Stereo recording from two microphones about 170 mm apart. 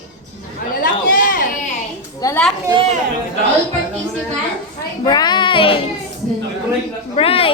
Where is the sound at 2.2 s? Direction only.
20° left (ahead or behind).